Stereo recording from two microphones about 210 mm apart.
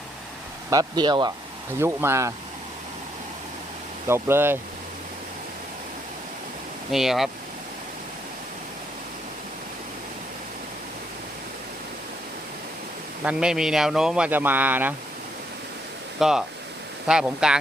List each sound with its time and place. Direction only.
0.7 s speech: 20° right (ahead or behind)
4.0 s speech: 10° right (ahead or behind)
6.9 s speech: centre (ahead or behind)
13.2 s speech: 5° right (ahead or behind)
16.2 s speech: centre (ahead or behind)